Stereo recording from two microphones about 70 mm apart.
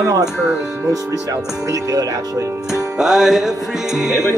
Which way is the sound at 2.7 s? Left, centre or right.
Centre.